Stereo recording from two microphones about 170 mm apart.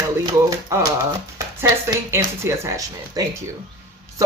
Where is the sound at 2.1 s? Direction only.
15° right (ahead or behind).